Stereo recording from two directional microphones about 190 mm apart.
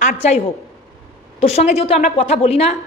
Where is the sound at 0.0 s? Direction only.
35° left (ahead or behind).